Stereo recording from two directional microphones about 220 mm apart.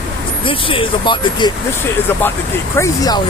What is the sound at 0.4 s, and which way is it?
Speech, 25° left (ahead or behind).